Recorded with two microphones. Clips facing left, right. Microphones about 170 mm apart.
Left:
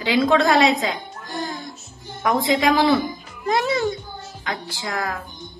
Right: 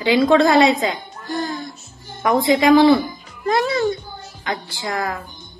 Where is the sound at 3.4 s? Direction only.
20° left (ahead or behind).